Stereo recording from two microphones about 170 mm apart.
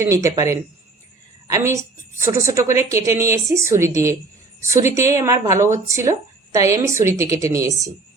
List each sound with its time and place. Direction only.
0.0 s speech: 20° right (ahead or behind)